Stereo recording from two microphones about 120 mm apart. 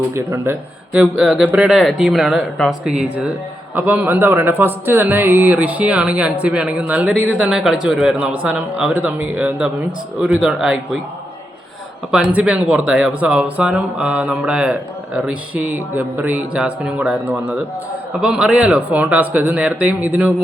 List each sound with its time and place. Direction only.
0.1 s speech: 20° right (ahead or behind)
0.9 s speech: 5° right (ahead or behind)
12.1 s speech: 10° right (ahead or behind)